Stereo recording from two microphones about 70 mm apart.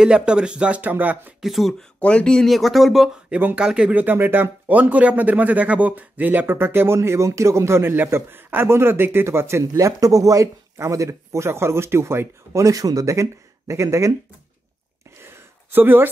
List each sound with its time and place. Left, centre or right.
0.0 s speech: centre
1.4 s speech: centre
2.0 s speech: centre
3.3 s speech: centre
3.9 s speech: right
7.0 s a man's voice: right
15.1 s a sound: right